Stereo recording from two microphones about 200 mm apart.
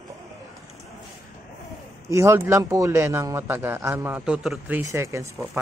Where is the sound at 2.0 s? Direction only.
15° right (ahead or behind).